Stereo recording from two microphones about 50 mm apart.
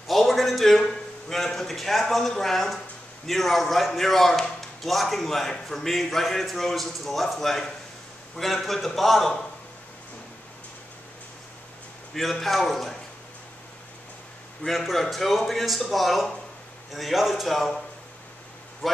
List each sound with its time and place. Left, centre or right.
0.0 s a sound: centre
1.3 s a man's voice: centre
12.1 s a man's voice: centre
14.7 s a man's voice: centre